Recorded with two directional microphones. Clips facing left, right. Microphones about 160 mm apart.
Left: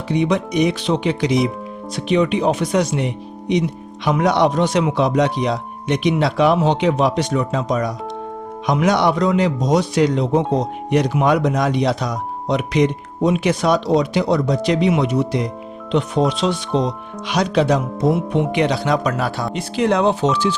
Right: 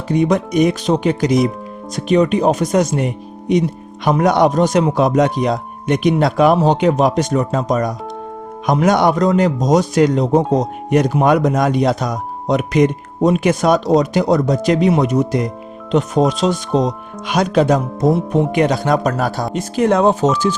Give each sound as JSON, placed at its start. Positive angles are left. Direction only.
{"t": 0.1, "sound": "speech", "side_deg": -45}